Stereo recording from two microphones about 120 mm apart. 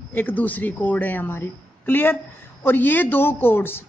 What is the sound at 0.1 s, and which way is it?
A woman's voice, 15° left (ahead or behind).